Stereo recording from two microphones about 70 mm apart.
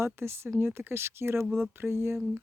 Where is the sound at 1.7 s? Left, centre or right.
Right.